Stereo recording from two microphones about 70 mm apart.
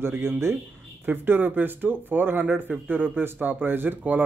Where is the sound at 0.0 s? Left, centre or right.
Right.